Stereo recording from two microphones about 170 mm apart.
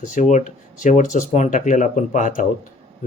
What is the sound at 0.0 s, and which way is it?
Speech, 45° left (ahead or behind).